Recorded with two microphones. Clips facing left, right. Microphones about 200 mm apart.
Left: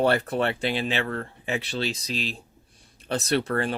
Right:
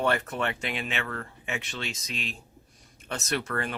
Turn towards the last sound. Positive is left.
turn(degrees=30)  # may be behind; listen again after turning